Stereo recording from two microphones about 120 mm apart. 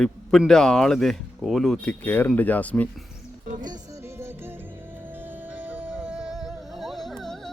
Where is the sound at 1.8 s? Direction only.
15° left (ahead or behind).